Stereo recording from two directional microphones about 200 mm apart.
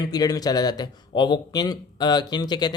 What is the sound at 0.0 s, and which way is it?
A man's voice, 20° left (ahead or behind).